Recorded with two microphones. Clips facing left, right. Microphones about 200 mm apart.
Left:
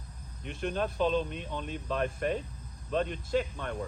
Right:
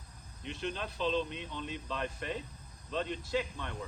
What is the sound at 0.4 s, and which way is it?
Speech, 50° left (ahead or behind).